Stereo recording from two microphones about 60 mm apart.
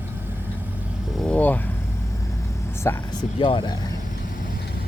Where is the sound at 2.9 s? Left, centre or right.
Left.